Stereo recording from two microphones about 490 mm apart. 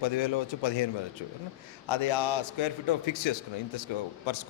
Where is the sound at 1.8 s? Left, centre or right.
Left.